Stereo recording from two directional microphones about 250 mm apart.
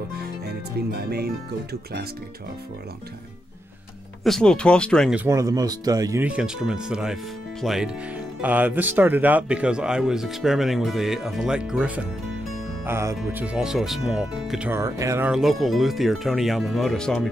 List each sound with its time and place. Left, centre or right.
0.1 s speech: right
4.2 s speech: centre